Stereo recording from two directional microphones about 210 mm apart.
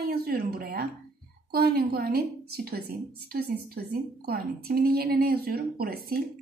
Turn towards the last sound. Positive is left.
turn(degrees=-45)  # may be behind; listen again after turning